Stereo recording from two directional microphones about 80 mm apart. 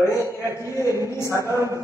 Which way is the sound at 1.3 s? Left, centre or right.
Right.